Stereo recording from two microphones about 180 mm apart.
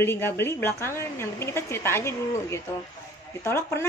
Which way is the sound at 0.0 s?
10° left (ahead or behind).